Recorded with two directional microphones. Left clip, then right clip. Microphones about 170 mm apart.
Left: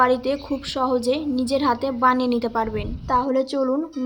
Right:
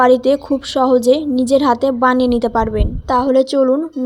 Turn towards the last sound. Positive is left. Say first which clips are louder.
# right 9 dB
turn(degrees=-35)  # may be behind; listen again after turning